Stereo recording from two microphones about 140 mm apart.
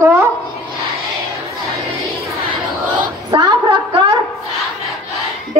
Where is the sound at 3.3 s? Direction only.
30° right (ahead or behind).